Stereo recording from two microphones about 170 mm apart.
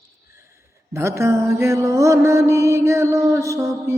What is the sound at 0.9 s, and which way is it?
Mantra, 15° right (ahead or behind).